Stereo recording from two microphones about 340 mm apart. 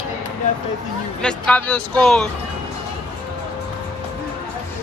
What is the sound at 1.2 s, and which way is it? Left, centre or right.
Speech, centre.